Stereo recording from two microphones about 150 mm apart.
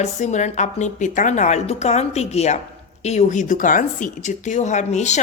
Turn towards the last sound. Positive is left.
turn(degrees=50)  # may be behind; listen again after turning